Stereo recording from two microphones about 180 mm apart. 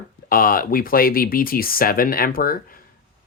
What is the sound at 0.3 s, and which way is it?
Speech, 50° left (ahead or behind).